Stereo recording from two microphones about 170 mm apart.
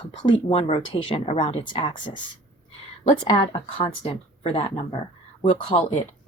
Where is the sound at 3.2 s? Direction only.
35° left (ahead or behind).